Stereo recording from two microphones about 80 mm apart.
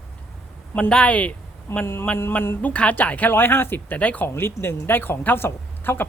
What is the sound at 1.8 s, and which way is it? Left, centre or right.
Speech, left.